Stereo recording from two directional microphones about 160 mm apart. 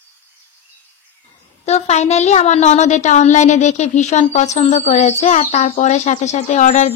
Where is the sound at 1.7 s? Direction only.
45° left (ahead or behind).